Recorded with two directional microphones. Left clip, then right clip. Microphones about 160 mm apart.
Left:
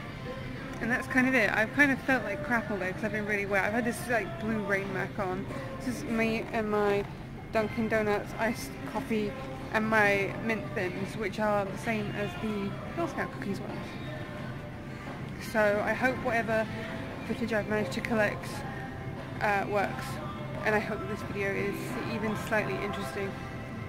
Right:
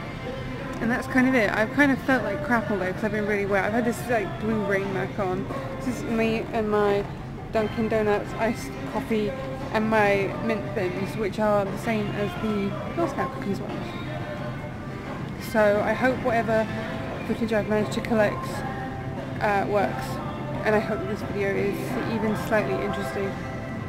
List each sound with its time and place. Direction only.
0.8 s speech: 20° right (ahead or behind)
3.3 s a woman's voice: 10° right (ahead or behind)
13.0 s speech: 10° right (ahead or behind)
15.5 s speech: 15° right (ahead or behind)
19.4 s speech: 15° right (ahead or behind)